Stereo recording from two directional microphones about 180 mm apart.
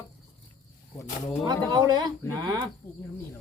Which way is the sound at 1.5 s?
20° right (ahead or behind).